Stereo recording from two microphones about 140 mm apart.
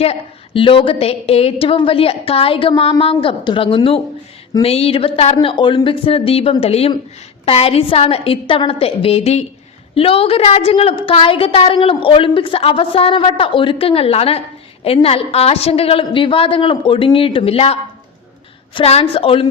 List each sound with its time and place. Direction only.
0.0 s a woman's voice: 45° left (ahead or behind)